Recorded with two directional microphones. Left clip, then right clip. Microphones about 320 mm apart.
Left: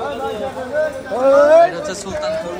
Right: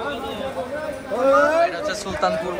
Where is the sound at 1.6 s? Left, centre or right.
Centre.